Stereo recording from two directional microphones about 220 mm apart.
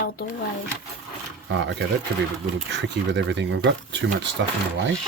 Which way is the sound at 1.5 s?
55° right (ahead or behind).